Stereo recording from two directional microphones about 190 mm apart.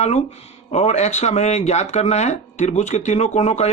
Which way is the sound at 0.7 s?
35° left (ahead or behind).